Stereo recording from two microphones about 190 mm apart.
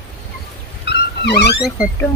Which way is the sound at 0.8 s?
60° left (ahead or behind).